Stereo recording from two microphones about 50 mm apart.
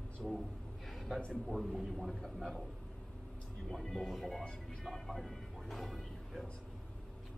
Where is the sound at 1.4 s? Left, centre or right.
Centre.